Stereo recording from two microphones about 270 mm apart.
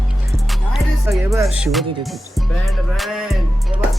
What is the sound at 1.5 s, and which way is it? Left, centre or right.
Speech, centre.